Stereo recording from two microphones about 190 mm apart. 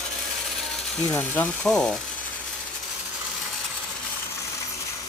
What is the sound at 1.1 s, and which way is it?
Speech, 10° left (ahead or behind).